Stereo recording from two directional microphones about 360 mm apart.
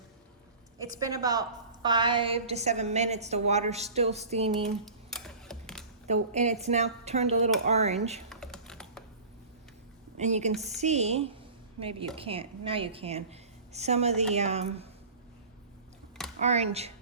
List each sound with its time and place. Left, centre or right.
0.8 s a woman's voice: centre
4.9 s typing: centre
6.1 s a woman's voice: centre
8.3 s typing: centre
10.2 s a woman's voice: centre
16.4 s a woman's voice: centre